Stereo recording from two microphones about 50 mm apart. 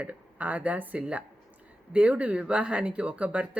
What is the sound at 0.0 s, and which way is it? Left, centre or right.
Speech, right.